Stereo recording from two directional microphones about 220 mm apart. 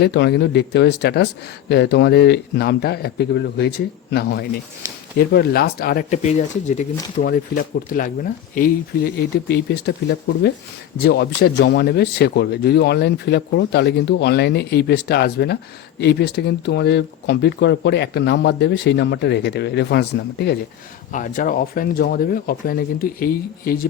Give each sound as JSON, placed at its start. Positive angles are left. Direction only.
{"t": 0.0, "sound": "speech", "side_deg": 50}
{"t": 21.1, "sound": "speech", "side_deg": 35}